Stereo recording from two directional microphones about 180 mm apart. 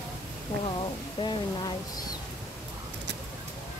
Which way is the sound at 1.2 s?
25° left (ahead or behind).